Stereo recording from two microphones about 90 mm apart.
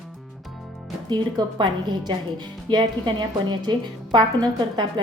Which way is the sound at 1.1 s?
55° right (ahead or behind).